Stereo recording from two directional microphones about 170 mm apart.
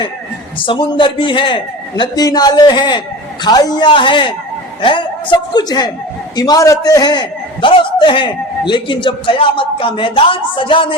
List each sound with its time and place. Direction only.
0.6 s a man's voice: 30° left (ahead or behind)